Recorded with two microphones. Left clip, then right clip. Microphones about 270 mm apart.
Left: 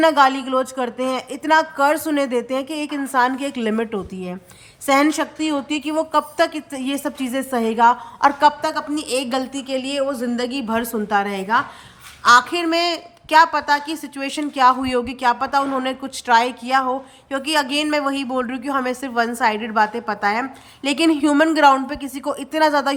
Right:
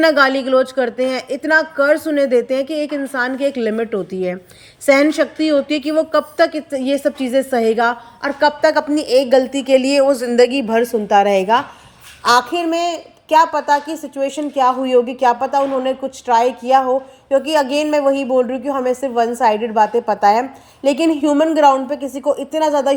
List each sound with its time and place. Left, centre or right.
0.0 s a woman's voice: centre
5.1 s a woman's voice: centre
10.7 s a woman's voice: centre
22.2 s speech: left
22.5 s a woman's voice: centre